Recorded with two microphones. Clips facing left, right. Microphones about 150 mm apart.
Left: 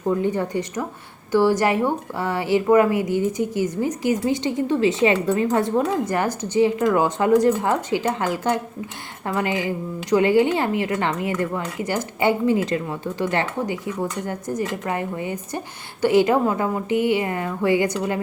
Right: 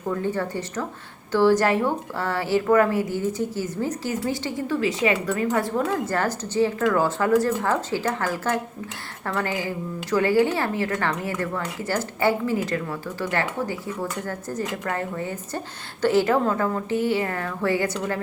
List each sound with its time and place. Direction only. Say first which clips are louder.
0.0 s speech: left 4 dB; 20° left (ahead or behind)